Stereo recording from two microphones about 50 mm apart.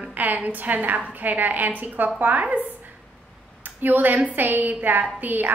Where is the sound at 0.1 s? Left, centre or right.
Right.